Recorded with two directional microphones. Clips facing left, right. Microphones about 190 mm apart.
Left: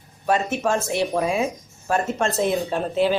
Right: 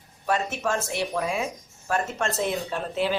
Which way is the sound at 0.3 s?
25° left (ahead or behind).